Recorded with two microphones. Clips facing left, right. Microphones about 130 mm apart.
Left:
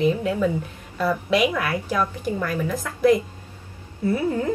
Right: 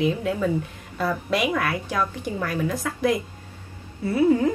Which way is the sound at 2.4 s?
10° right (ahead or behind).